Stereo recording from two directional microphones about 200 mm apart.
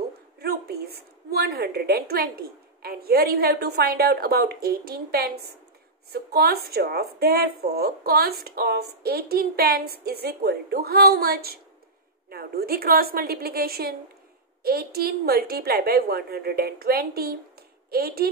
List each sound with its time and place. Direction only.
0.4 s a woman's voice: 50° right (ahead or behind)